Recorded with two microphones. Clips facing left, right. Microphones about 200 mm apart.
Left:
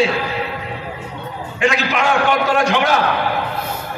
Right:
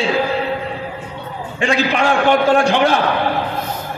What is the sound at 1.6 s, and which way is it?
A man's voice, 30° right (ahead or behind).